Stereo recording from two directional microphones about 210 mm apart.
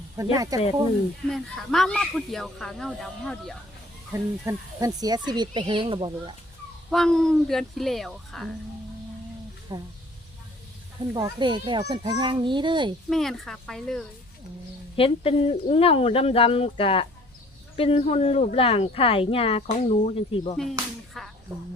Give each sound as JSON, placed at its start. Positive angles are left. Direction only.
{"t": 0.2, "sound": "speech", "side_deg": -15}
{"t": 1.3, "sound": "speech", "side_deg": 0}
{"t": 4.1, "sound": "speech", "side_deg": -15}
{"t": 6.9, "sound": "speech", "side_deg": 0}
{"t": 9.7, "sound": "speech", "side_deg": -20}
{"t": 11.1, "sound": "speech", "side_deg": -20}
{"t": 13.1, "sound": "speech", "side_deg": 0}
{"t": 14.9, "sound": "speech", "side_deg": 25}
{"t": 21.2, "sound": "a sound", "side_deg": 0}